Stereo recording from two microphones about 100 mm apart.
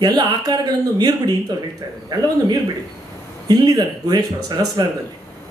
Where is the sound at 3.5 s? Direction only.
40° right (ahead or behind).